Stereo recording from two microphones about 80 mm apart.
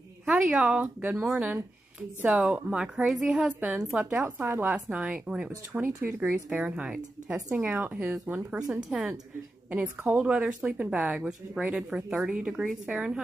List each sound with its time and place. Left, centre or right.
0.5 s a woman's voice: centre
4.7 s speech: centre
5.7 s a woman's voice: right
6.3 s a woman's voice: centre
8.5 s speech: centre
9.7 s speech: centre